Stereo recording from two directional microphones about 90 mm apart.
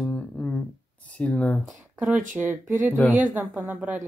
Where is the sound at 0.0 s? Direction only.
15° left (ahead or behind).